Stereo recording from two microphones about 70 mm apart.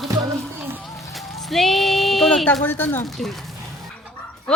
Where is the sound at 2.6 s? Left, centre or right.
Left.